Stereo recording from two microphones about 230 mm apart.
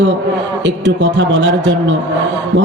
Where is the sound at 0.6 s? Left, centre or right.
Right.